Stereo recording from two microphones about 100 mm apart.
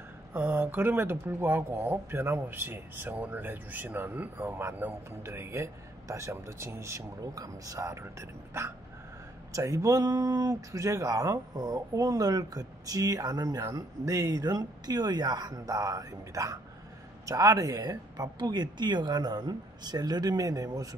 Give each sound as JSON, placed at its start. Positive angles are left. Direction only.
{"t": 0.3, "sound": "speech", "side_deg": -25}